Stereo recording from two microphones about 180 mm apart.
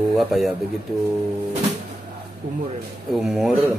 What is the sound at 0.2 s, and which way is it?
Speech, centre (ahead or behind).